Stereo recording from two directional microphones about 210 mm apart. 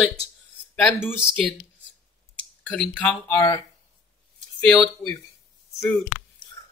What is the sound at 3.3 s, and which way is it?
Speech, 20° left (ahead or behind).